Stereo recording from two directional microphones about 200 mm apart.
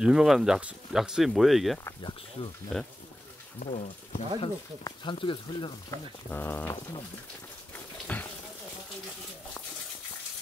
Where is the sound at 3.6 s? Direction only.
35° left (ahead or behind).